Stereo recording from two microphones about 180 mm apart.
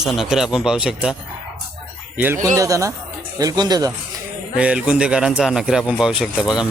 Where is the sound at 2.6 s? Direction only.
20° right (ahead or behind).